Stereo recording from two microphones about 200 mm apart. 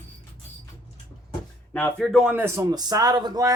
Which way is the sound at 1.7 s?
5° left (ahead or behind).